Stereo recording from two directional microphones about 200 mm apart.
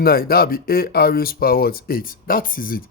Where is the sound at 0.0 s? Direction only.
50° left (ahead or behind).